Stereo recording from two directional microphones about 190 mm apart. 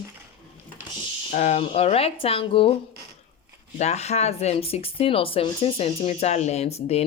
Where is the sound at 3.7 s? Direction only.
35° left (ahead or behind).